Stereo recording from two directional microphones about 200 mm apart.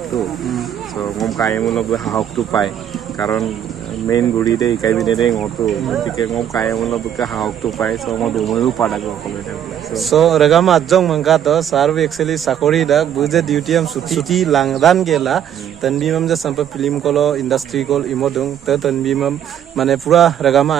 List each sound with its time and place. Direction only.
0.1 s a man's voice: centre (ahead or behind)
4.1 s speech: 20° left (ahead or behind)
4.9 s a man's voice: centre (ahead or behind)
9.9 s a man's voice: centre (ahead or behind)